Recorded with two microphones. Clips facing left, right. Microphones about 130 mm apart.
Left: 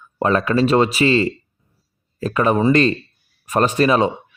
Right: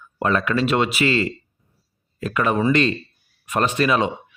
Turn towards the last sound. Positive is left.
turn(degrees=35)  # may be behind; listen again after turning